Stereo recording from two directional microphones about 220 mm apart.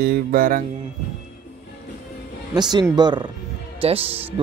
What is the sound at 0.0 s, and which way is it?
Speech, 45° right (ahead or behind).